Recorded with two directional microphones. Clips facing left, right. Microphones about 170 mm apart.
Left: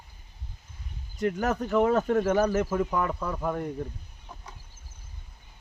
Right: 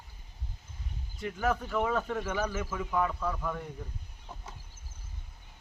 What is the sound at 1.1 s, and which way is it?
Speech, 45° left (ahead or behind).